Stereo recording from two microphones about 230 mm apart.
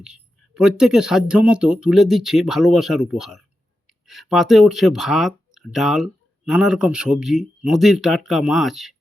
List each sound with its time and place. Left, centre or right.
0.0 s speech: centre